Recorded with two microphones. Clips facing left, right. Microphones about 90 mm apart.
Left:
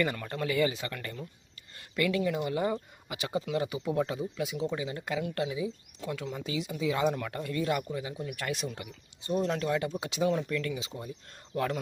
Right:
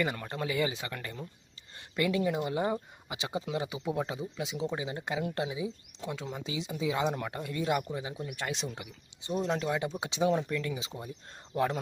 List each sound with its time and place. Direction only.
0.0 s speech: 15° right (ahead or behind)